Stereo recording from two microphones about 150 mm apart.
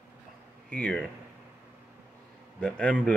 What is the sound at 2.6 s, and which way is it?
Speech, 10° left (ahead or behind).